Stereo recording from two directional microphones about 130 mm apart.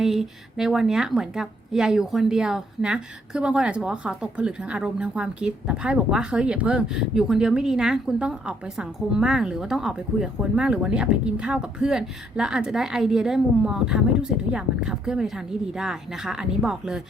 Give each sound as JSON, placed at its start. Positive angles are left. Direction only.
{"t": 0.0, "sound": "a woman's voice", "side_deg": -5}